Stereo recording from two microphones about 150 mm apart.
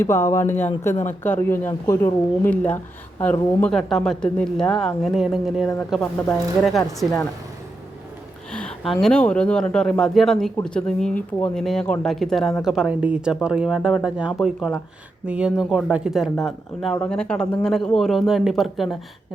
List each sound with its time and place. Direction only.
0.0 s speech: 15° left (ahead or behind); by 7.3 s centre (ahead or behind)
8.5 s speech: 5° left (ahead or behind)